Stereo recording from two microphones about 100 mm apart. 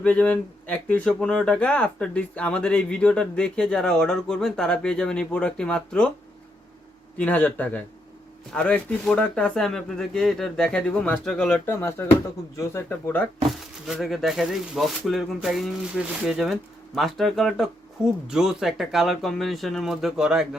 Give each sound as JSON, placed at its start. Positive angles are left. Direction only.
{"t": 0.0, "sound": "speech", "side_deg": 15}
{"t": 7.2, "sound": "speech", "side_deg": 15}
{"t": 11.6, "sound": "speech", "side_deg": 25}
{"t": 13.5, "sound": "speech", "side_deg": 0}